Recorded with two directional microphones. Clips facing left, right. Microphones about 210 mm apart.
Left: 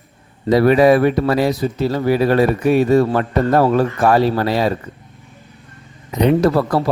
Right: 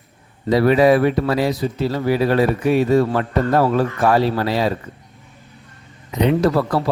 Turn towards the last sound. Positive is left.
turn(degrees=45)  # may be behind; listen again after turning